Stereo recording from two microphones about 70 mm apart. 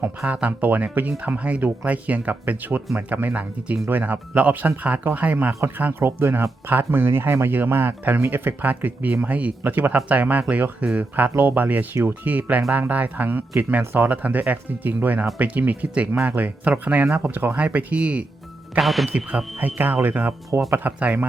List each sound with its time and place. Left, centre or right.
0.3 s speech: centre
18.8 s speech: centre
19.0 s speech: centre